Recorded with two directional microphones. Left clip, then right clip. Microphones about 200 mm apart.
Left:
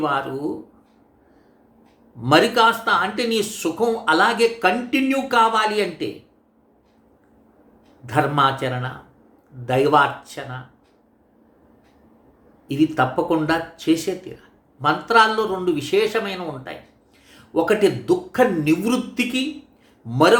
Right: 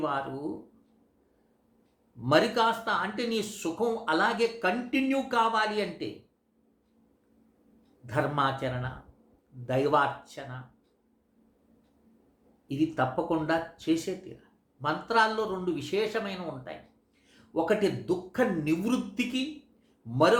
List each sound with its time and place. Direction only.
2.2 s speech: 10° left (ahead or behind)
8.0 s speech: 10° left (ahead or behind)
12.6 s speech: 10° left (ahead or behind)